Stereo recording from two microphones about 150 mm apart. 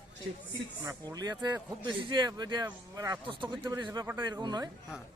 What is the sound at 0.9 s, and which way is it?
Speech, 25° right (ahead or behind).